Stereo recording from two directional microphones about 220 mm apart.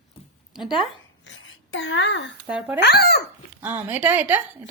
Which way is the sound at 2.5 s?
5° right (ahead or behind).